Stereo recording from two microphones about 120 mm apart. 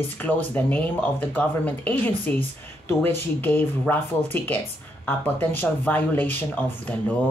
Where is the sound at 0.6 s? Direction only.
15° left (ahead or behind).